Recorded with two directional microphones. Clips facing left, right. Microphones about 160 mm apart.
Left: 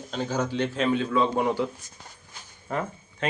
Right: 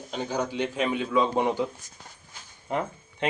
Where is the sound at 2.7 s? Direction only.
20° right (ahead or behind).